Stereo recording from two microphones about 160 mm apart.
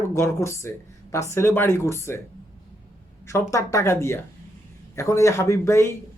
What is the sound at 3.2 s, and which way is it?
Speech, 20° left (ahead or behind).